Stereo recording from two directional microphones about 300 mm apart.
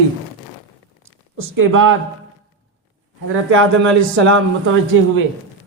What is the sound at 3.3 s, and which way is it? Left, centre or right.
A man's voice, right.